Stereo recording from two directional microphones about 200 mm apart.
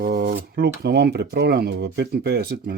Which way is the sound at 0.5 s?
55° right (ahead or behind).